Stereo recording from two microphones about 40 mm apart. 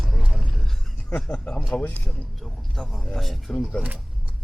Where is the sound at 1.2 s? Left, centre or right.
Left.